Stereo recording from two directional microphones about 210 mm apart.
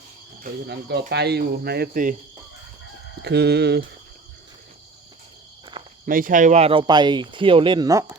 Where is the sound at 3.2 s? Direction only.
50° right (ahead or behind).